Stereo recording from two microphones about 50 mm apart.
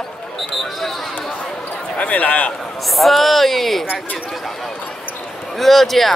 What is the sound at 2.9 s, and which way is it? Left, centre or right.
Speech, centre.